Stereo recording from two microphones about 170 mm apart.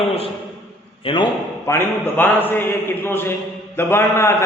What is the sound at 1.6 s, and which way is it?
A man's voice, 10° left (ahead or behind).